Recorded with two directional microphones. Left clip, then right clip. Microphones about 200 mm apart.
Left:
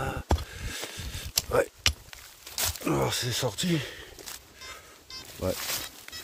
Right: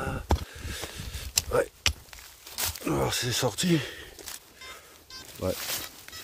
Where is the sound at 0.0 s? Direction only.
5° left (ahead or behind).